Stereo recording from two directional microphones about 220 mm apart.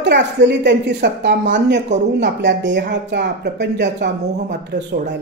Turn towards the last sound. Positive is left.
turn(degrees=-50)  # may be behind; listen again after turning